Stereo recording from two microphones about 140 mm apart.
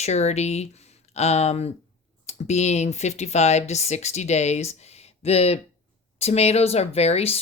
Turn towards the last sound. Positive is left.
turn(degrees=45)  # may be behind; listen again after turning